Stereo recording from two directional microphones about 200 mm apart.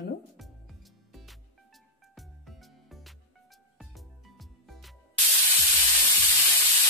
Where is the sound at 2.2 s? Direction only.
Centre (ahead or behind).